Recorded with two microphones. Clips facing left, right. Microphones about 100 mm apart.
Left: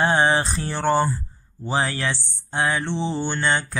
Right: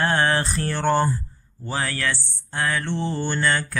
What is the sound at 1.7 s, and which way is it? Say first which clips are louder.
Speech: left 2 dB; 20° left (ahead or behind).